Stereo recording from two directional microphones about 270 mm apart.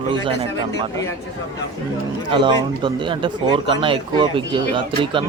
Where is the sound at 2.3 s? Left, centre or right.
Centre.